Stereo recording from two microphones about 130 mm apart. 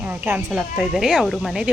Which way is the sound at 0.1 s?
10° right (ahead or behind).